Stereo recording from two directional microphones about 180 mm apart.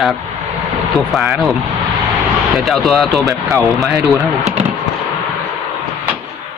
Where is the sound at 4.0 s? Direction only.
15° right (ahead or behind).